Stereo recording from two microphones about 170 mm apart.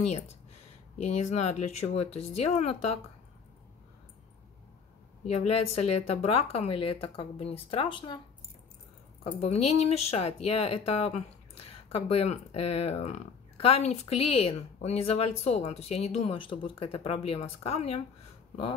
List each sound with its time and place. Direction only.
1.0 s speech: 40° left (ahead or behind)
5.2 s speech: 40° left (ahead or behind)
9.4 s speech: 35° left (ahead or behind)